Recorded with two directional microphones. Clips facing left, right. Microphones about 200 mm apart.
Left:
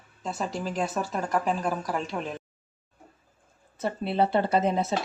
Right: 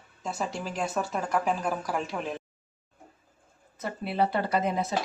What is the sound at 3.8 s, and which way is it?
Speech, 30° left (ahead or behind).